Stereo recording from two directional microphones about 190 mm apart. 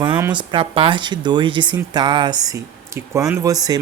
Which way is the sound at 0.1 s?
10° right (ahead or behind).